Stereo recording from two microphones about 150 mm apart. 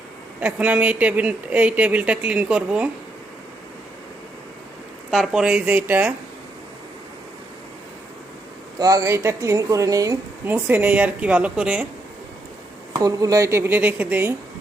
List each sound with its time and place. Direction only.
0.3 s speech: 10° right (ahead or behind)
5.1 s speech: 5° right (ahead or behind)
8.8 s speech: 25° right (ahead or behind); by 11.9 s 10° right (ahead or behind)
12.9 s speech: 25° right (ahead or behind)